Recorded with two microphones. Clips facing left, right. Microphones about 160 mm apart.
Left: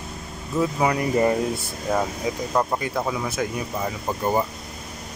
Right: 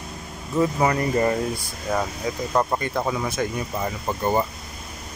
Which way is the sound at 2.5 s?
Centre (ahead or behind).